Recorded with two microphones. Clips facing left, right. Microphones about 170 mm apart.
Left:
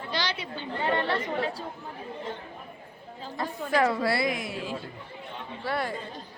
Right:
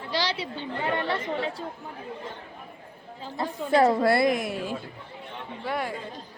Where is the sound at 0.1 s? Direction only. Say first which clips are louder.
Right 3 dB; 30° right (ahead or behind).